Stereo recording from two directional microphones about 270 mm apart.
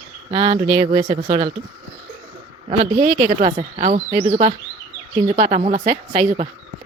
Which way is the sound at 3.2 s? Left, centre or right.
Centre.